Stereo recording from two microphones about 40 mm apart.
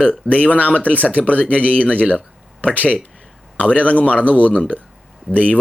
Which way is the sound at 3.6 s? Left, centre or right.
Left.